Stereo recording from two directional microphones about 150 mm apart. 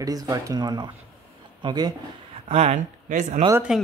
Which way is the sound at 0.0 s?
25° right (ahead or behind).